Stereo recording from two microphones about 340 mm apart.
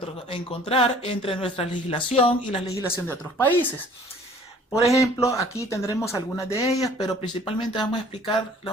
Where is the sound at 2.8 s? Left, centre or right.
Centre.